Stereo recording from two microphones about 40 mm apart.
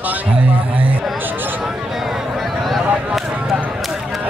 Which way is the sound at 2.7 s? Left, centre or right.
Centre.